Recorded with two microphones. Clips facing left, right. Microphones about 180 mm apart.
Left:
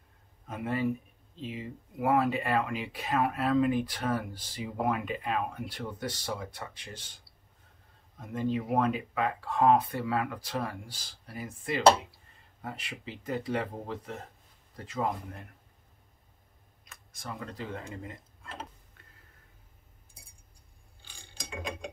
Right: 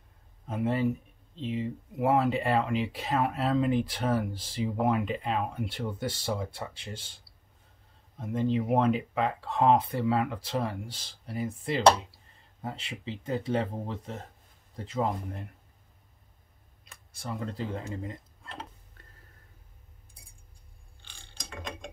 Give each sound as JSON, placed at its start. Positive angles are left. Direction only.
{"t": 0.5, "sound": "speech", "side_deg": -30}
{"t": 8.2, "sound": "speech", "side_deg": -25}
{"t": 16.9, "sound": "speech", "side_deg": -30}
{"t": 21.0, "sound": "ratchet", "side_deg": 10}